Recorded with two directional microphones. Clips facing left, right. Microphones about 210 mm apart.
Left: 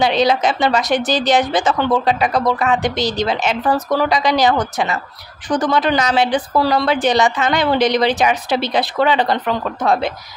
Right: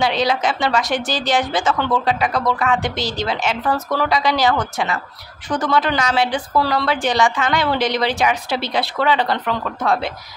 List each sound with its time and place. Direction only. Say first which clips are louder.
0.0 s a woman's voice: left 4 dB; 20° left (ahead or behind)